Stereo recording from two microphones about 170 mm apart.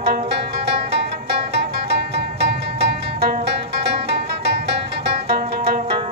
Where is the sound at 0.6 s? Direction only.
80° right.